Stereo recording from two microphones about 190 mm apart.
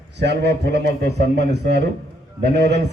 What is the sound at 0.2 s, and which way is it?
A man's voice, 60° right (ahead or behind).